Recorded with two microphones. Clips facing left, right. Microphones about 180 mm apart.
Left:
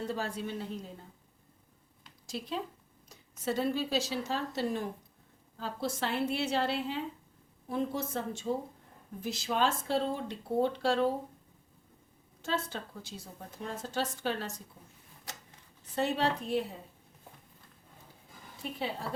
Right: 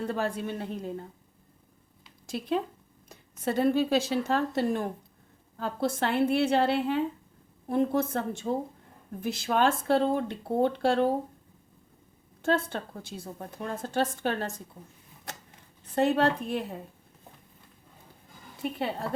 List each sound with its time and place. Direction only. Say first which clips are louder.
0.0 s a woman's voice: right 5 dB; 55° right (ahead or behind)
2.2 s a woman's voice: right 7 dB; 55° right (ahead or behind)
12.4 s a woman's voice: right 7 dB; 55° right (ahead or behind)
15.3 s a sound: right 5 dB; 55° right (ahead or behind)
16.0 s a woman's voice: right 6 dB; 55° right (ahead or behind)